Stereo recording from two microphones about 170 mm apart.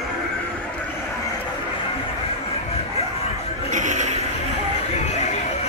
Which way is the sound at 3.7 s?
45° right (ahead or behind).